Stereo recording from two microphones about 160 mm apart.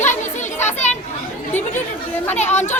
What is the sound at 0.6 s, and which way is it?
Children playing, 45° left (ahead or behind).